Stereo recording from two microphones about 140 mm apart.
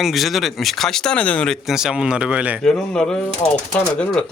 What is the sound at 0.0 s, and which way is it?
Speech, centre (ahead or behind).